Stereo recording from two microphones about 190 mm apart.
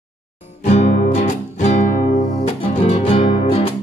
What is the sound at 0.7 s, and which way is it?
Music, 35° left (ahead or behind).